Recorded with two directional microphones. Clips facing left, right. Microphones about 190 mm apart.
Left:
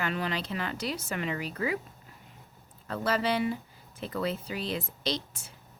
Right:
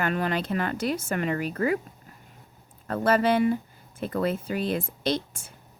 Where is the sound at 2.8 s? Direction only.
50° right (ahead or behind).